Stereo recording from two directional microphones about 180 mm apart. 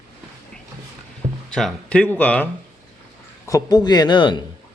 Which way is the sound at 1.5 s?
5° left (ahead or behind).